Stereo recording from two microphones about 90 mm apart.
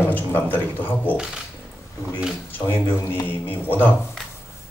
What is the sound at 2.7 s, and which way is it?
A man's voice, 25° left (ahead or behind).